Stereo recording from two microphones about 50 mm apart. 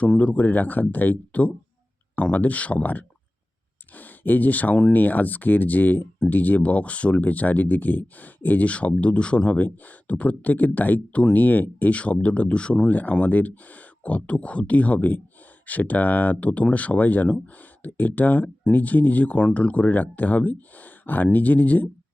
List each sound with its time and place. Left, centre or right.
0.2 s speech: left
9.6 s speech: left
12.9 s speech: left